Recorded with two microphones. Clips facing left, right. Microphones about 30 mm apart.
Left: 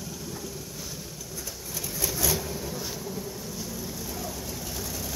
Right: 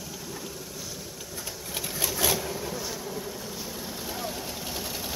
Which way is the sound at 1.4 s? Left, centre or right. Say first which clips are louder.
Right 3 dB; right.